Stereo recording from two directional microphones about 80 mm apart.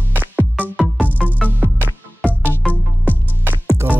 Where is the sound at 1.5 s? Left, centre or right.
Right.